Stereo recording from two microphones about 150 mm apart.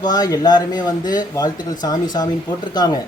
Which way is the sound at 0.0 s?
25° left (ahead or behind).